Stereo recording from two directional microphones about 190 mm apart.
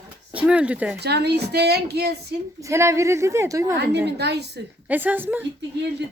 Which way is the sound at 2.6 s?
15° right (ahead or behind).